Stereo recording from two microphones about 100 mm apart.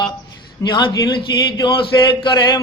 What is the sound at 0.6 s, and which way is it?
Chant, 50° left (ahead or behind).